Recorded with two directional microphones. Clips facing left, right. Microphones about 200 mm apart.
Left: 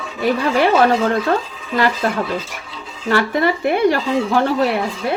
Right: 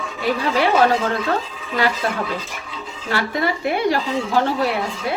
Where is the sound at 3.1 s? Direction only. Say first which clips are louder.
Left 5 dB; 55° left (ahead or behind).